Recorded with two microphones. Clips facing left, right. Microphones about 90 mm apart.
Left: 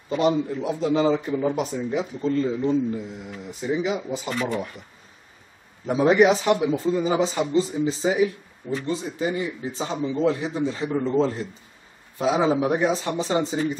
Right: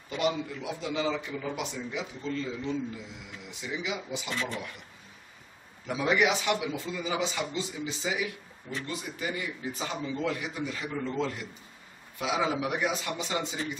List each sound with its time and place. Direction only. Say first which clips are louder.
0.1 s a man's voice: left 8 dB; 35° left (ahead or behind)
5.9 s a man's voice: left 9 dB; 40° left (ahead or behind)